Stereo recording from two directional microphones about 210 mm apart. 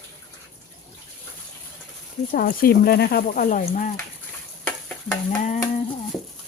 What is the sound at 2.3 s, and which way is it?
Speech, 45° left (ahead or behind).